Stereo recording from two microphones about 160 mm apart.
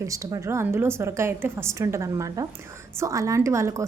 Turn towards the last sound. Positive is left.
turn(degrees=-20)  # may be behind; listen again after turning